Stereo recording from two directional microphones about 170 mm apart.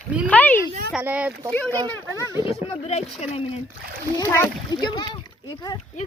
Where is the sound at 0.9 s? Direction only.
5° right (ahead or behind).